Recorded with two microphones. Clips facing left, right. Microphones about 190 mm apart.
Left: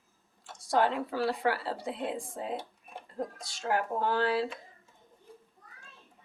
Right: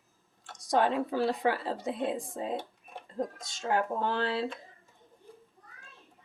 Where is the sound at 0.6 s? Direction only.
20° right (ahead or behind).